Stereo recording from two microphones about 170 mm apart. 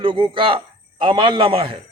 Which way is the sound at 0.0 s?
30° right (ahead or behind).